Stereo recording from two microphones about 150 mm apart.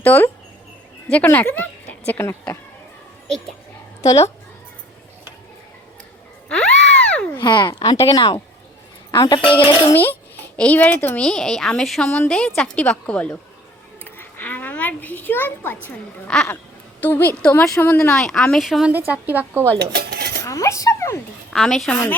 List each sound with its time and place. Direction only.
0.0 s a woman's voice: 10° left (ahead or behind)
4.0 s a woman's voice: 20° left (ahead or behind)
6.5 s a sound: 5° left (ahead or behind)
7.3 s a child's voice: 30° left (ahead or behind)
9.9 s speech: 10° left (ahead or behind)
14.0 s a sound: 10° left (ahead or behind)
15.9 s speech: 5° left (ahead or behind); by 19.7 s 15° right (ahead or behind)
19.8 s dishes: 90° right
20.4 s speech: 20° left (ahead or behind)
21.5 s speech: 5° left (ahead or behind)